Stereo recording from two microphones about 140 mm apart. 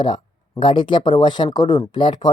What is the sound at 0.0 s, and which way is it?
Speech, 35° left (ahead or behind).